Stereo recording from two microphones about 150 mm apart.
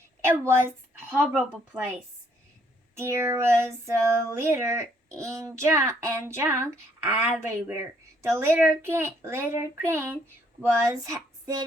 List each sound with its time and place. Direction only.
0.2 s a woman's voice: 15° right (ahead or behind)
3.0 s a sound: 15° right (ahead or behind)
7.3 s a child's voice: 15° right (ahead or behind)